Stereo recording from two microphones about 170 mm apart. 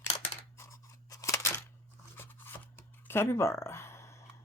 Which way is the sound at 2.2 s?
15° left (ahead or behind).